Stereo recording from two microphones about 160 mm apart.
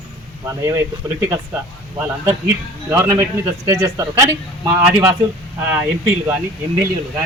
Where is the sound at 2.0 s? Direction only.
10° right (ahead or behind).